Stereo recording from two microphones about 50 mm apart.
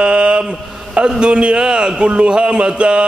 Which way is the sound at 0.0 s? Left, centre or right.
Right.